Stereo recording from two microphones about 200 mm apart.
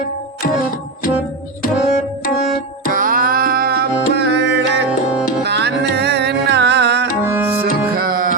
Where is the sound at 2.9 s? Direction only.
45° right (ahead or behind); by 7.0 s 60° right (ahead or behind).